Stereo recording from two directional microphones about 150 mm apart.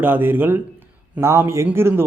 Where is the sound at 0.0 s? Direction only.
15° right (ahead or behind).